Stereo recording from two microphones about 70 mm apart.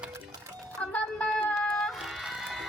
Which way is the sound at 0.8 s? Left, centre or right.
Centre.